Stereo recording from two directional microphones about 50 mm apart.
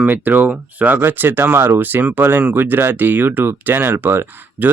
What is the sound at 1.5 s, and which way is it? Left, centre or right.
Speech, right.